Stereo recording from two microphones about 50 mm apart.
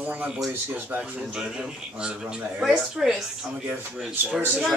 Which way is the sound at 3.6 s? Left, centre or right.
Right.